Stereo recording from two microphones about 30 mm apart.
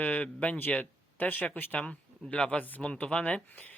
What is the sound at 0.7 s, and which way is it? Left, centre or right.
Speech, left.